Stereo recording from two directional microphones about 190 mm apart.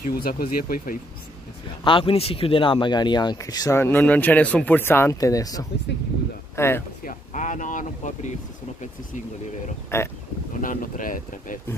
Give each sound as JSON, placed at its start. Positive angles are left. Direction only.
{"t": 0.0, "sound": "speech", "side_deg": 50}
{"t": 1.9, "sound": "speech", "side_deg": 25}
{"t": 7.1, "sound": "speech", "side_deg": 40}
{"t": 9.9, "sound": "speech", "side_deg": 15}
{"t": 10.6, "sound": "speech", "side_deg": 45}